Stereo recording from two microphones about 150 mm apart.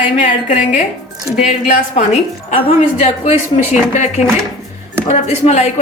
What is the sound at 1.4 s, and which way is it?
Speech, 60° left (ahead or behind).